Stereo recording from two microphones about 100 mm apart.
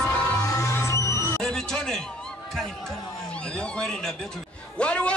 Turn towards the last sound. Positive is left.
turn(degrees=10)  # may be behind; listen again after turning